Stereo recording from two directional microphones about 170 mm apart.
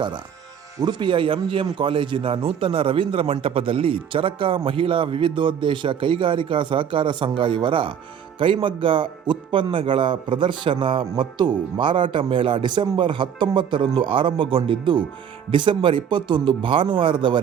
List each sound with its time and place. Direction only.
0.8 s speech: 25° right (ahead or behind)